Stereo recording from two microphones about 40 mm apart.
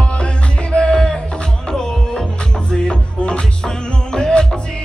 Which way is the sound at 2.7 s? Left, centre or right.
Left.